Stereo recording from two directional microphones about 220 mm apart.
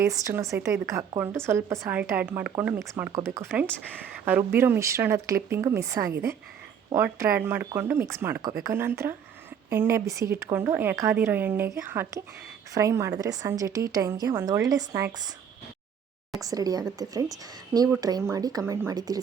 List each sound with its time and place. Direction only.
0.0 s a woman's voice: 15° right (ahead or behind)
16.4 s a woman's voice: 15° right (ahead or behind)